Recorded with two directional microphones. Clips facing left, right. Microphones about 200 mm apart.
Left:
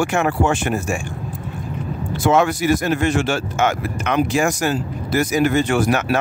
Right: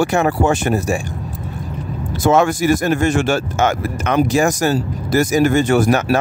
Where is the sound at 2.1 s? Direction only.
45° right (ahead or behind).